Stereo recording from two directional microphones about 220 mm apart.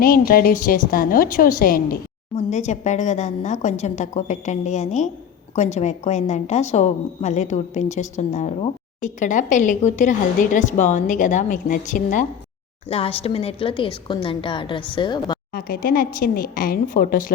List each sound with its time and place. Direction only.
0.0 s a woman's voice: 40° left (ahead or behind)
12.9 s a woman's voice: 25° left (ahead or behind)
15.5 s a woman's voice: 40° left (ahead or behind)